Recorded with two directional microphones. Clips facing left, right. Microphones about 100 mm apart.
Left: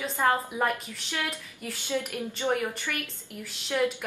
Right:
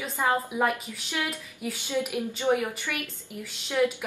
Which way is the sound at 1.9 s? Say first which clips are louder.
Right 3 dB; 15° right (ahead or behind).